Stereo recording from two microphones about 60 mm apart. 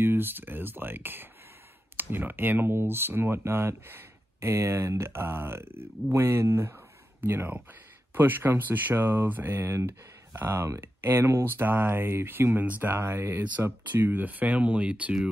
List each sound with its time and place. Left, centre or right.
0.0 s speech: right